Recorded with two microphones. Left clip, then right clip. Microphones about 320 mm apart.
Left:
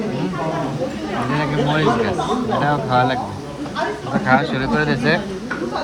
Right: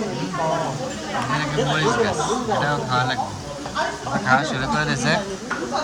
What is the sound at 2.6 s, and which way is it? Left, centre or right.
Speech, centre.